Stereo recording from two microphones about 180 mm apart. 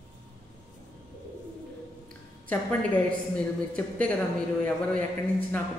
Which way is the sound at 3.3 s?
5° left (ahead or behind).